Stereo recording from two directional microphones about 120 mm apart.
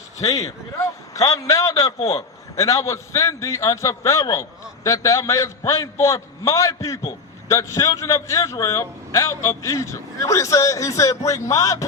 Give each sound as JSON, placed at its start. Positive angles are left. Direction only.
{"t": 0.3, "sound": "a man's voice", "side_deg": 25}